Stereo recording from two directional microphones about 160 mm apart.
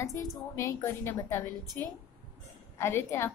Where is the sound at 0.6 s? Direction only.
20° left (ahead or behind).